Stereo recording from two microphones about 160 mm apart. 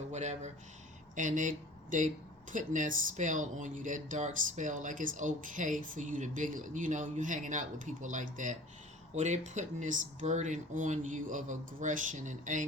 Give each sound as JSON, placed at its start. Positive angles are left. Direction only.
{"t": 0.1, "sound": "speech", "side_deg": -45}